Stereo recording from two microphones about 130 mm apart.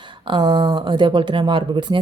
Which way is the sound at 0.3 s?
35° right (ahead or behind).